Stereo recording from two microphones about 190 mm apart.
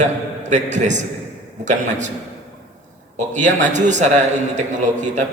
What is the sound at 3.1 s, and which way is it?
A man's voice, 40° right (ahead or behind).